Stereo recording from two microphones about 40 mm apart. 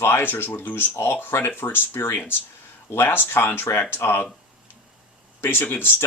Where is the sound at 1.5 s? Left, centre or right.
Left.